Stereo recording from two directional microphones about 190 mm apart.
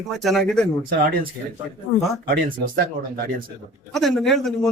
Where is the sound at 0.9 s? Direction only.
50° right (ahead or behind).